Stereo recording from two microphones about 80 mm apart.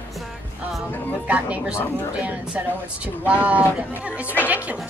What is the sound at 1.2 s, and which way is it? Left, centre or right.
Speech, centre.